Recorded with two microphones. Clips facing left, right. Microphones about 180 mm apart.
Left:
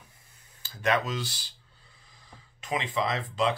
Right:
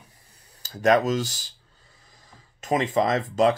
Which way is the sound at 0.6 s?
40° right (ahead or behind).